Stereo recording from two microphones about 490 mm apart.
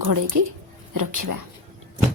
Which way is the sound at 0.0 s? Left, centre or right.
Right.